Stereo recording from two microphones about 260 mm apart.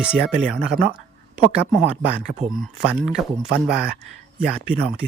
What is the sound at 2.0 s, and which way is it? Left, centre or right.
Speech, centre.